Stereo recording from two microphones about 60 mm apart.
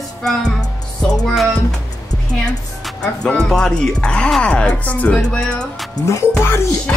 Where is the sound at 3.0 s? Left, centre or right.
Centre.